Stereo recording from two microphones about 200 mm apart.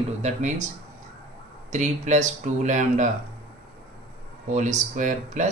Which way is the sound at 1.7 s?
35° right (ahead or behind).